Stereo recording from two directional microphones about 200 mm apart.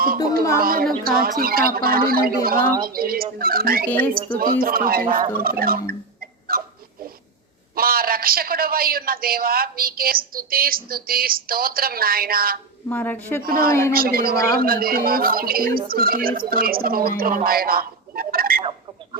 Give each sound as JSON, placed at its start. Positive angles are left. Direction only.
{"t": 0.0, "sound": "a woman's voice", "side_deg": -45}
{"t": 3.8, "sound": "a woman's voice", "side_deg": 10}
{"t": 4.3, "sound": "a woman's voice", "side_deg": -45}
{"t": 6.5, "sound": "a sound", "side_deg": -45}
{"t": 7.8, "sound": "a woman's voice", "side_deg": -45}
{"t": 12.9, "sound": "a woman's voice", "side_deg": 10}
{"t": 13.4, "sound": "a woman's voice", "side_deg": -45}